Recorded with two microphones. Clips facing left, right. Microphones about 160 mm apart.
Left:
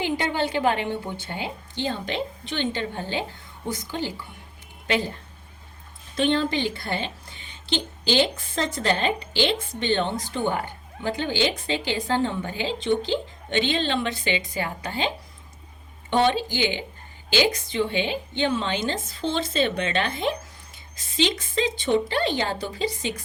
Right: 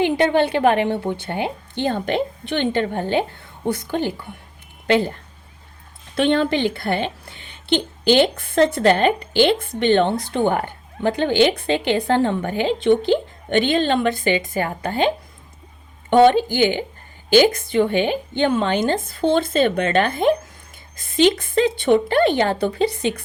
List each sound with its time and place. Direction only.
0.0 s a woman's voice: 60° right (ahead or behind)
6.1 s a woman's voice: 65° right (ahead or behind)